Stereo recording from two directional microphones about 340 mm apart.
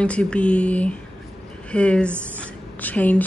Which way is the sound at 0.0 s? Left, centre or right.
Centre.